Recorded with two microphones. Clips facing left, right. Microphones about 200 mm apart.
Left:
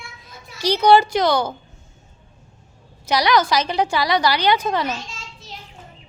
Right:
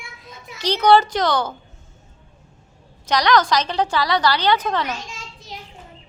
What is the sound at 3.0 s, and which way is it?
A woman's voice, 10° left (ahead or behind).